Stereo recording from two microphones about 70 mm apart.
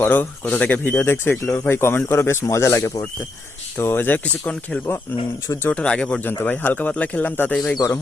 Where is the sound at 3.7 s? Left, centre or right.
Left.